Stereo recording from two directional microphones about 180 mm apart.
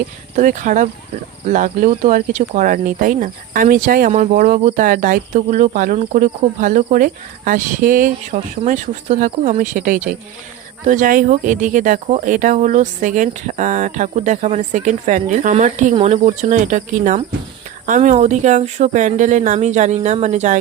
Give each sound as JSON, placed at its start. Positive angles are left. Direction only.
{"t": 0.3, "sound": "speech", "side_deg": -45}